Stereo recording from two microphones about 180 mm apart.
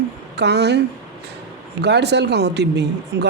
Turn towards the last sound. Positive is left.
turn(degrees=-70)  # may be behind; listen again after turning